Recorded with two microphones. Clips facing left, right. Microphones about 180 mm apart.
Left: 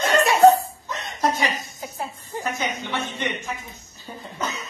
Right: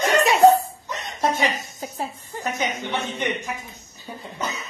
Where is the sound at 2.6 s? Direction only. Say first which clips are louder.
Right 2 dB; 20° right (ahead or behind).